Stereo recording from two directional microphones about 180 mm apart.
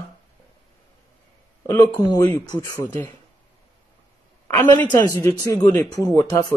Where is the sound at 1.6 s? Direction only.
15° left (ahead or behind).